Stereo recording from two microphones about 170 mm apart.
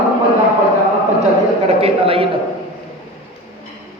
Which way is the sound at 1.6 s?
35° right (ahead or behind).